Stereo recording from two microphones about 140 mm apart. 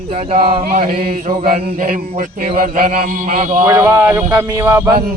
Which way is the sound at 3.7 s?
20° right (ahead or behind).